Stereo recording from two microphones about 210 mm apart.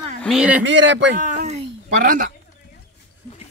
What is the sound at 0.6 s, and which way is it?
Speech, 60° right (ahead or behind).